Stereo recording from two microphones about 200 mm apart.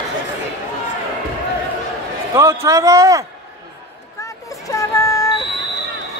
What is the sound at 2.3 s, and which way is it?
Speech, 15° right (ahead or behind).